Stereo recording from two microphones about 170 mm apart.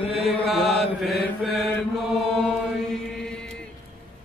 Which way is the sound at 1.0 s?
Centre (ahead or behind).